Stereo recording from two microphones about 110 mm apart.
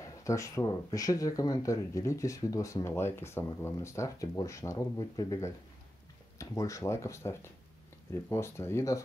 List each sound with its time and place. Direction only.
0.0 s speech: 30° left (ahead or behind)